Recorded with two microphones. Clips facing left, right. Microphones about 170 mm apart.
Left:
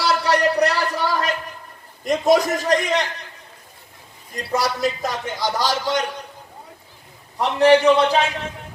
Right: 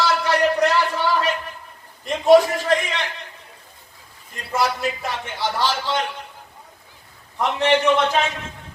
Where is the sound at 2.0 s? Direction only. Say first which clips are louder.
Right 3 dB; 40° left (ahead or behind).